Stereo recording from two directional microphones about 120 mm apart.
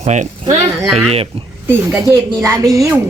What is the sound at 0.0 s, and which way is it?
Speech, 75° right (ahead or behind).